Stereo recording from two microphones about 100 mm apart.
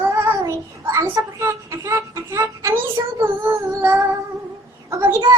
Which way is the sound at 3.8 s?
25° right (ahead or behind).